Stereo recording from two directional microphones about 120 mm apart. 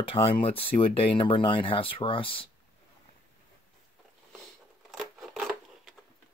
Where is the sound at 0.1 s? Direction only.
50° left (ahead or behind).